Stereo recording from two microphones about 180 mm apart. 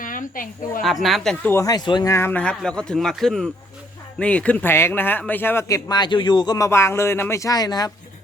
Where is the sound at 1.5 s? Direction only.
20° left (ahead or behind).